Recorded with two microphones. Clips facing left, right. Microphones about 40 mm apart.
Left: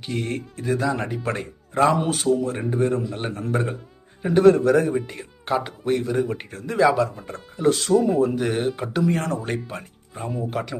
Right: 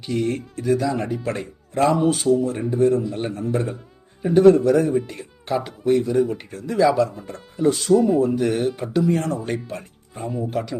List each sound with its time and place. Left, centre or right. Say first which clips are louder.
0.0 s speech: right 4 dB; left
0.5 s speech: right 3 dB; left
0.9 s speech: right 1 dB; left
1.9 s speech: right 3 dB; left
3.1 s speech: right 2 dB; left
3.3 s speech: right 1 dB; left
8.4 s speech: right 2 dB; left
10.2 s speech: right 2 dB; centre
10.5 s speech: right 2 dB; left